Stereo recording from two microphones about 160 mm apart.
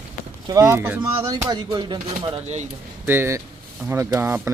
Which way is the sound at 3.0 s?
15° right (ahead or behind).